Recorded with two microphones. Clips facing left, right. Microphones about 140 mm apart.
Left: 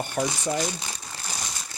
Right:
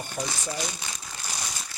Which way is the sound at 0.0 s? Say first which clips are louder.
Left 6 dB; 65° left (ahead or behind).